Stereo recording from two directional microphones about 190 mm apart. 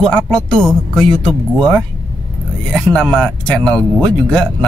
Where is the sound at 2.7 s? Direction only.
5° left (ahead or behind).